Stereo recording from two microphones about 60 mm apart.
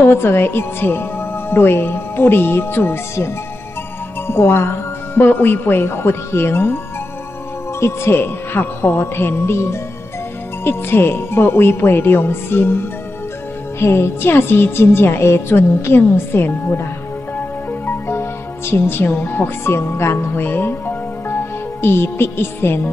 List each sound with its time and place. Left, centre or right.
0.0 s a woman's voice: left
4.3 s a woman's voice: left
7.8 s a woman's voice: left
17.4 s music: left